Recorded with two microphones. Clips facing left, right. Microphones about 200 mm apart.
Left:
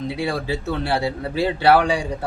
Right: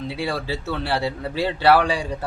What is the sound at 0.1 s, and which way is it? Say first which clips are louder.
A man's voice: left 1 dB; 15° left (ahead or behind).